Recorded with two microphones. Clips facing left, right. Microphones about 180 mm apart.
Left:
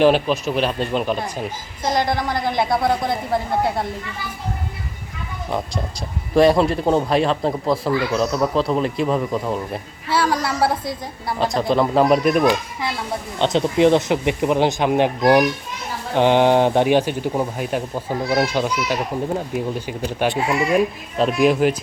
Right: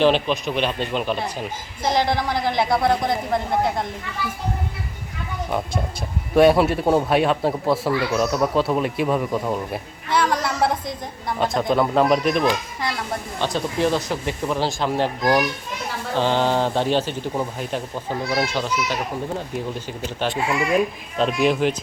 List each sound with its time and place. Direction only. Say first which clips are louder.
0.0 s speech: left 3 dB; 5° left (ahead or behind)
5.5 s speech: left 1 dB; centre (ahead or behind)
13.4 s speech: left 7 dB; 20° left (ahead or behind); by 21.8 s 5° left (ahead or behind)